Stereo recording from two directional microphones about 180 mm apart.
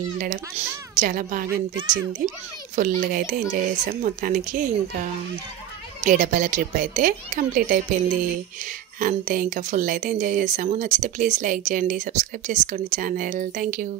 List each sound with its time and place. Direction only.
0.2 s speech: 45° right (ahead or behind)
2.7 s speech: 45° right (ahead or behind)